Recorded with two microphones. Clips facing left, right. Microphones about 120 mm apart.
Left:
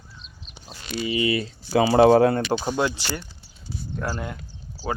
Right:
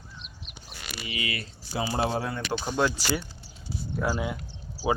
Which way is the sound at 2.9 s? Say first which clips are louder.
Even; 5° right (ahead or behind).